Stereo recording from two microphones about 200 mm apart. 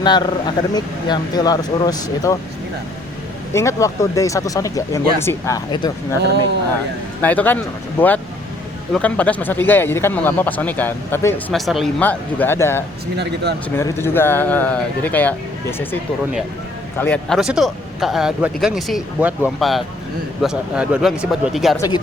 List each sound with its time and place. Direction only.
0.0 s speech: 20° left (ahead or behind)
3.5 s speech: 15° left (ahead or behind)
7.2 s speech: 10° left (ahead or behind)
11.5 s speech: centre (ahead or behind)
13.1 s speech: 55° right (ahead or behind)
13.7 s speech: 10° left (ahead or behind)
17.0 s speech: 5° left (ahead or behind)
21.8 s speech: 20° left (ahead or behind)